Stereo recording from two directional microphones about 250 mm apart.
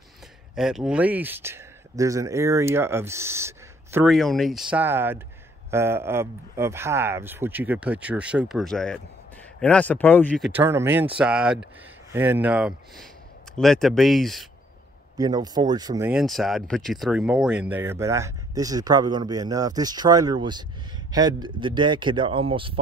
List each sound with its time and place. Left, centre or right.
0.6 s speech: centre
10.6 s speech: centre
15.1 s speech: centre
16.1 s speech: centre; by 22.8 s right